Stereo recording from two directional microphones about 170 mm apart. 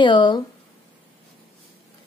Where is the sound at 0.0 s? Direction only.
25° left (ahead or behind).